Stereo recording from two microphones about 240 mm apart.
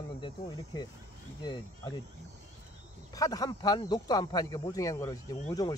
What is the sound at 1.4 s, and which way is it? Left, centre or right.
Speech, centre.